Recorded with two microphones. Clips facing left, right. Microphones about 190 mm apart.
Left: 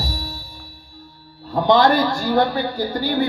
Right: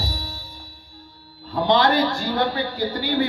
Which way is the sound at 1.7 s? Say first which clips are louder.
Left 3 dB; 45° left (ahead or behind).